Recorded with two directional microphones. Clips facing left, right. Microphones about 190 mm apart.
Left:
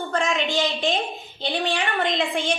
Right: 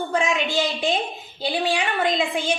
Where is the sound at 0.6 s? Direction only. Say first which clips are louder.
Even; centre (ahead or behind).